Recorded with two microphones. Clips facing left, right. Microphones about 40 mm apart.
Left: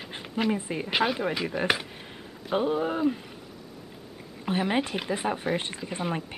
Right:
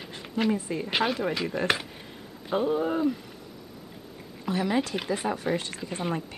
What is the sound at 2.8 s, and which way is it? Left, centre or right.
Speech, centre.